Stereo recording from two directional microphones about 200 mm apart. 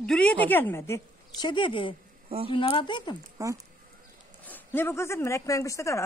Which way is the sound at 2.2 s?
30° right (ahead or behind).